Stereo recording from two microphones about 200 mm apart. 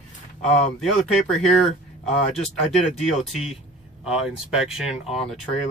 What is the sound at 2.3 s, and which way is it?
Speech, 35° left (ahead or behind).